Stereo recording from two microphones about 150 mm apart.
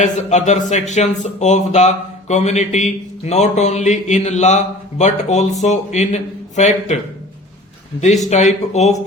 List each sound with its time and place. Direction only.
0.0 s speech: 50° left (ahead or behind)
8.3 s speech: 50° left (ahead or behind)